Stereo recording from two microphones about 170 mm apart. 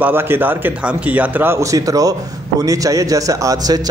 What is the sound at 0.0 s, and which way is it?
A man's voice, 15° right (ahead or behind).